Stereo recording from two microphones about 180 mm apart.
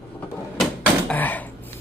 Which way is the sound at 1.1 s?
10° left (ahead or behind).